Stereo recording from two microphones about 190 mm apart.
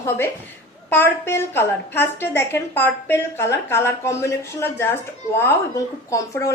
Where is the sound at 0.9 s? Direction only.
10° left (ahead or behind).